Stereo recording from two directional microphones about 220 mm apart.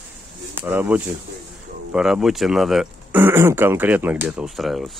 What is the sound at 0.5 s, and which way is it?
Speech, 10° right (ahead or behind).